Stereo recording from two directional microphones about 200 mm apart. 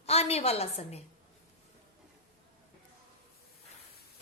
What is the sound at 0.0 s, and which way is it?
A woman's voice, 30° left (ahead or behind).